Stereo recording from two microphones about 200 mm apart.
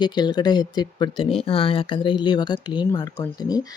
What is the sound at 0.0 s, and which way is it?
Speech, 20° left (ahead or behind).